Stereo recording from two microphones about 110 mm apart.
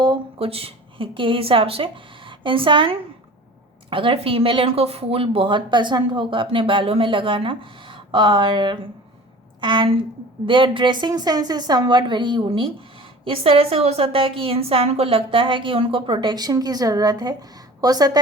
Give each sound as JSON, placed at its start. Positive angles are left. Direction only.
{"t": 0.3, "sound": "a woman's voice", "side_deg": -60}